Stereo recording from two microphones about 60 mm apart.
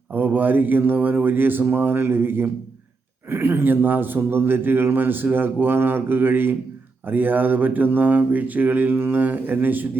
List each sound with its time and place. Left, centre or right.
0.1 s a man's voice: right